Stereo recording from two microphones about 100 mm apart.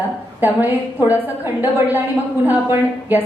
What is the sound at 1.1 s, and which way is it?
A woman's voice, 20° right (ahead or behind).